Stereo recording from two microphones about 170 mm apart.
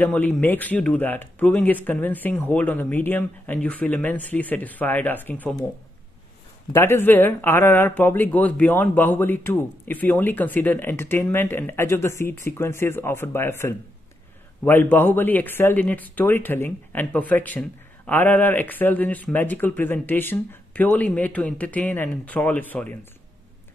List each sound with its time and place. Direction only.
0.0 s speech: 10° left (ahead or behind)
6.7 s speech: 15° left (ahead or behind)